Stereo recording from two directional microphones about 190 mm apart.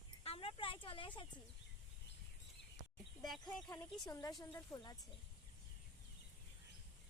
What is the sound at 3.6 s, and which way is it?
A woman's voice, 15° left (ahead or behind).